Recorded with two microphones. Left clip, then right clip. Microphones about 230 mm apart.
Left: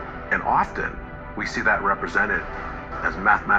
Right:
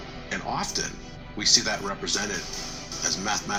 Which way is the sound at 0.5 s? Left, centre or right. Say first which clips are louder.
Left 8 dB; right.